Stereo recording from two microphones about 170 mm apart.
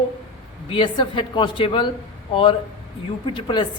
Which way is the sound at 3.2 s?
30° left (ahead or behind).